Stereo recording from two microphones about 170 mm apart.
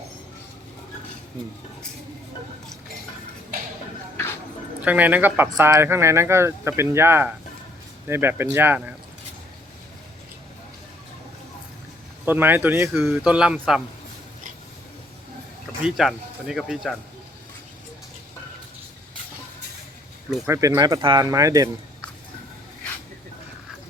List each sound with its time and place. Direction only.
4.8 s speech: 10° right (ahead or behind)
12.2 s speech: 10° right (ahead or behind)
15.8 s speech: centre (ahead or behind)
20.5 s speech: 20° right (ahead or behind)